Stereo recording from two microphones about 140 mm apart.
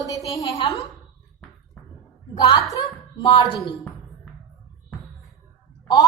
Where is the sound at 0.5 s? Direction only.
40° left (ahead or behind).